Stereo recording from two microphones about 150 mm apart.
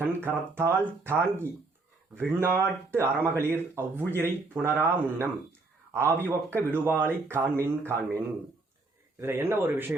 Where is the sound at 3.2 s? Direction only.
15° right (ahead or behind).